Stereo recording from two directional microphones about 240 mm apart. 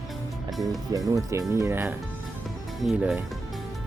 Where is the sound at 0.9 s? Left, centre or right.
Centre.